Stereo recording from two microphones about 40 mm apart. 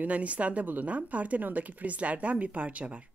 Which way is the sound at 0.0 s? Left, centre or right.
Right.